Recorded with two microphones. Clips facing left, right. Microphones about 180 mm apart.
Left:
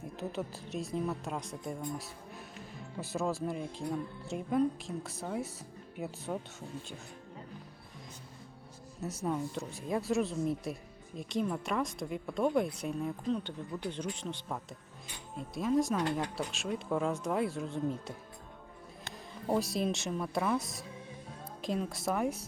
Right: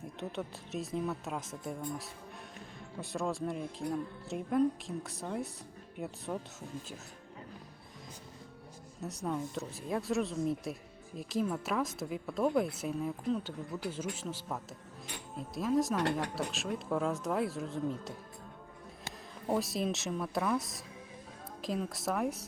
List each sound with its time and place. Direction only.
0.2 s a woman's voice: centre (ahead or behind)
9.0 s a woman's voice: centre (ahead or behind)
19.5 s a woman's voice: centre (ahead or behind)